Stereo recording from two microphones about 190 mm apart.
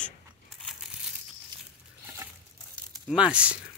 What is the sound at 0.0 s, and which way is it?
Biting, centre (ahead or behind).